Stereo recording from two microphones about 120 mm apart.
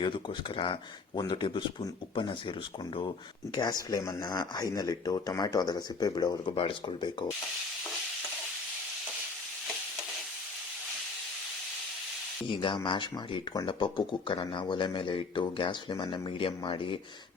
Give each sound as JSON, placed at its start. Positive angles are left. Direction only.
{"t": 0.0, "sound": "speech", "side_deg": 45}
{"t": 12.5, "sound": "speech", "side_deg": 45}